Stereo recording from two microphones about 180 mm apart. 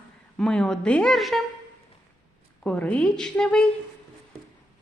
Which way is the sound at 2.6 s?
5° left (ahead or behind).